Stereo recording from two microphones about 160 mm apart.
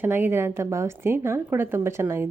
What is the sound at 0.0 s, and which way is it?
A woman's voice, 15° right (ahead or behind).